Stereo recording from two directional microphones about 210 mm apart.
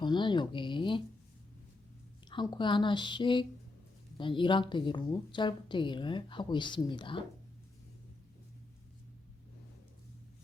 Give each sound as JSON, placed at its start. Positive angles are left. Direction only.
{"t": 0.0, "sound": "a woman's voice", "side_deg": 20}
{"t": 2.3, "sound": "a woman's voice", "side_deg": 20}